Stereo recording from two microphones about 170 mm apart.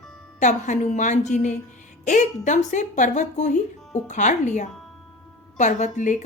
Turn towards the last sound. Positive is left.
turn(degrees=45)  # may be behind; listen again after turning